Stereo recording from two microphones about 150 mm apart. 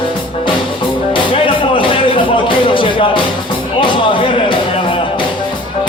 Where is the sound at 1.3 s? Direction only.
35° left (ahead or behind).